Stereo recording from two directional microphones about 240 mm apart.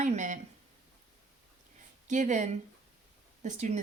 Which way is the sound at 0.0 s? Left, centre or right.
Right.